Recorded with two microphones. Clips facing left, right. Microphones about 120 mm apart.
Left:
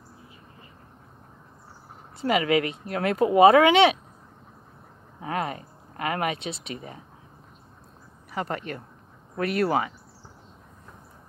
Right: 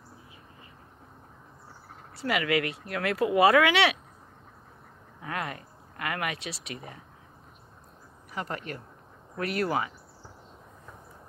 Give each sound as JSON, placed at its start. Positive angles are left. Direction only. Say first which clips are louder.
{"t": 2.1, "sound": "speech", "louder": "left 5 dB", "side_deg": 25}
{"t": 5.2, "sound": "speech", "louder": "left 5 dB", "side_deg": 25}
{"t": 9.4, "sound": "speech", "louder": "left 4 dB", "side_deg": 25}